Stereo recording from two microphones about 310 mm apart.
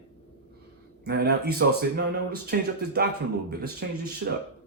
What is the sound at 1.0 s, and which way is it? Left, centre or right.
Speech, right.